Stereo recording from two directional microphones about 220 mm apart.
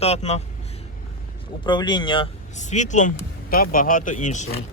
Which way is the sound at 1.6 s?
20° left (ahead or behind).